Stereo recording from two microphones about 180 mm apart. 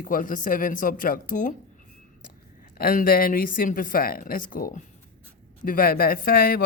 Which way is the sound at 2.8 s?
55° left (ahead or behind).